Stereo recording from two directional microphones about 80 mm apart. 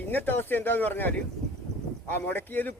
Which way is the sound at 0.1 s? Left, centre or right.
Left.